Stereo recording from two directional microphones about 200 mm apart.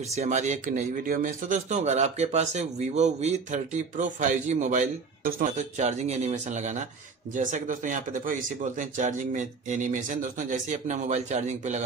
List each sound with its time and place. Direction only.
0.1 s speech: 35° right (ahead or behind)